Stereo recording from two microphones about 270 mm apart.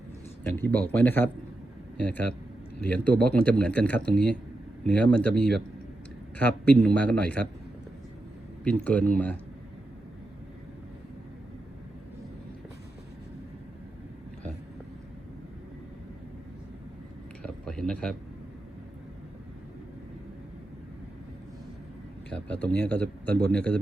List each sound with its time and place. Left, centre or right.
0.5 s a man's voice: centre
8.6 s a man's voice: centre
17.4 s a sound: centre
22.3 s speech: centre